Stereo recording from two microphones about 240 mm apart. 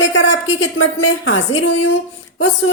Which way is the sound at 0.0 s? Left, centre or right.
Left.